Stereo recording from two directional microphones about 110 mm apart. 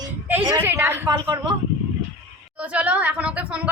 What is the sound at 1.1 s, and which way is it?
Speech, 40° right (ahead or behind).